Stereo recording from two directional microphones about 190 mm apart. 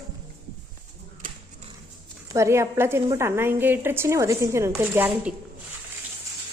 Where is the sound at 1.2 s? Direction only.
45° right (ahead or behind).